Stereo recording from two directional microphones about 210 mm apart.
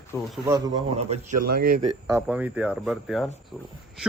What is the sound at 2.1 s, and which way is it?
A man's voice, 5° right (ahead or behind).